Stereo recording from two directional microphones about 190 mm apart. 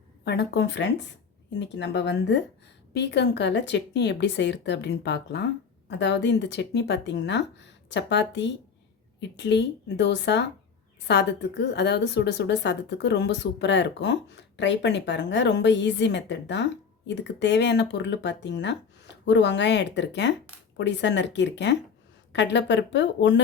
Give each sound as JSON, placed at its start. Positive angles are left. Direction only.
{"t": 0.3, "sound": "a woman's voice", "side_deg": 60}